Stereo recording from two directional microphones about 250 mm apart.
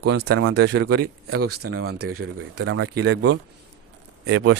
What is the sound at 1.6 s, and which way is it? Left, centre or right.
Speech, right.